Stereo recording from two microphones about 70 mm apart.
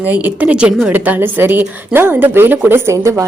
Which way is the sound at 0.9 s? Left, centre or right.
Right.